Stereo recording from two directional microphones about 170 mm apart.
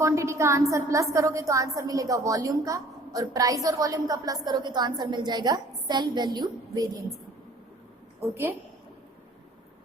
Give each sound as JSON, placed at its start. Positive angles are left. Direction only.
{"t": 0.0, "sound": "a woman's voice", "side_deg": -15}
{"t": 8.2, "sound": "a woman's voice", "side_deg": -15}